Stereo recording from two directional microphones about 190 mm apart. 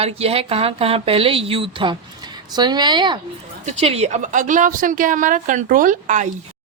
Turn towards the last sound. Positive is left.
turn(degrees=-40)  # may be behind; listen again after turning